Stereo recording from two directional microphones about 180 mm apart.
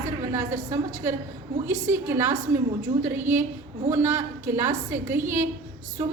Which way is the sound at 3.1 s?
10° right (ahead or behind).